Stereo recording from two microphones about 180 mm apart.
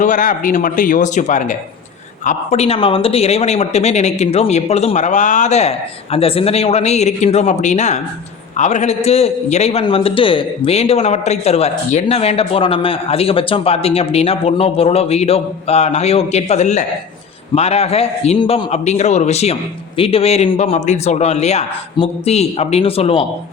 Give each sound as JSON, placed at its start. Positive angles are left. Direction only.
{"t": 0.0, "sound": "a man's voice", "side_deg": 45}